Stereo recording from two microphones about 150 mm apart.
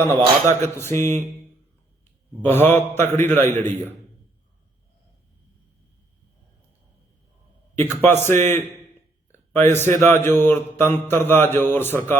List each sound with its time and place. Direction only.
0.4 s mantra: 20° left (ahead or behind)
2.4 s mantra: 15° left (ahead or behind)
7.8 s mantra: 15° left (ahead or behind)